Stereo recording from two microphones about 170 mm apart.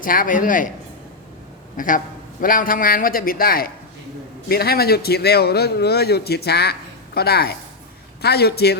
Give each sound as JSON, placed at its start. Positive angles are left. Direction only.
{"t": 0.0, "sound": "speech", "side_deg": 55}
{"t": 1.7, "sound": "a man's voice", "side_deg": 50}